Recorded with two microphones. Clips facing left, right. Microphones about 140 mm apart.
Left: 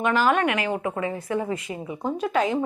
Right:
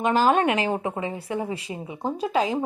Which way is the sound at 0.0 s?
35° right (ahead or behind).